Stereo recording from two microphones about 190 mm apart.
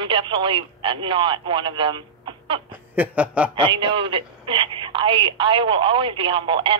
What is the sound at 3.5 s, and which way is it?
Speech, 25° right (ahead or behind).